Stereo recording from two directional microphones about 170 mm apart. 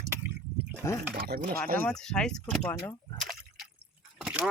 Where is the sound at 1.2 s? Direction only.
60° right (ahead or behind).